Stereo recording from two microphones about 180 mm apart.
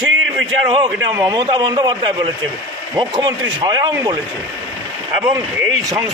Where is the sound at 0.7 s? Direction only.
20° right (ahead or behind).